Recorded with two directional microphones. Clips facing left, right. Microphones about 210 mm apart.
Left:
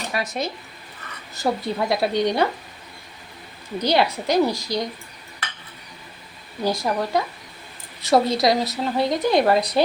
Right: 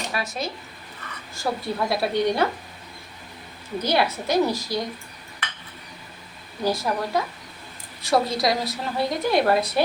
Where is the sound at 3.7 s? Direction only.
15° left (ahead or behind).